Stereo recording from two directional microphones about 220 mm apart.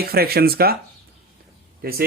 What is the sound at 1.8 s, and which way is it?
Speech, 45° right (ahead or behind).